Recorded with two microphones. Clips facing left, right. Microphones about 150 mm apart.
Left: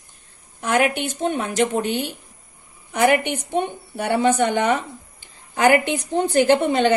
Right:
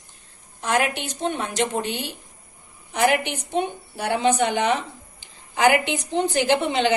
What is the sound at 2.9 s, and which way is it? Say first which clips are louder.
A woman's voice: left 3 dB; 55° left (ahead or behind).